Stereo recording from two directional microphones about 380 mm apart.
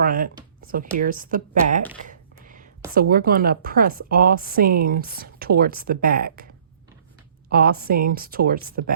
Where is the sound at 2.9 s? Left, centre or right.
Right.